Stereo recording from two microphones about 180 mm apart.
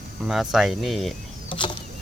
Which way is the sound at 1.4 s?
30° left (ahead or behind).